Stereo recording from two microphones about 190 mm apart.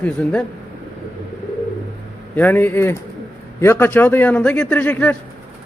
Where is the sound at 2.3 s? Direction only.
10° left (ahead or behind).